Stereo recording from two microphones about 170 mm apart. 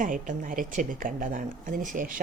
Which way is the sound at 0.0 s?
50° right (ahead or behind).